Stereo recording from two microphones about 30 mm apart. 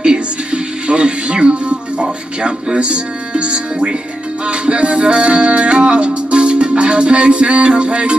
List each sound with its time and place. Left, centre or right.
0.0 s music: right
2.8 s speech: right
4.5 s music: right